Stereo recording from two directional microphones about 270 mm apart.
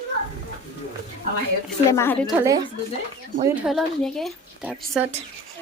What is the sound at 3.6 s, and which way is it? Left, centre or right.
Speech, centre.